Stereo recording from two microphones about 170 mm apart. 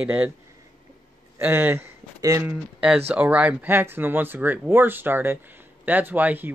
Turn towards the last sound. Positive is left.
turn(degrees=-10)  # may be behind; listen again after turning